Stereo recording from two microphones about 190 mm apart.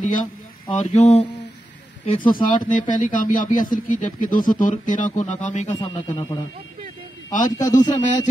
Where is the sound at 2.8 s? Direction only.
45° left (ahead or behind).